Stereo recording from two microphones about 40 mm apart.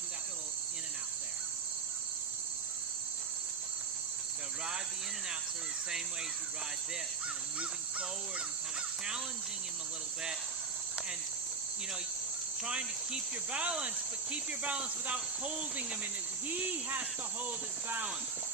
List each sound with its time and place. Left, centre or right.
12.6 s cricket: right
16.9 s cricket: right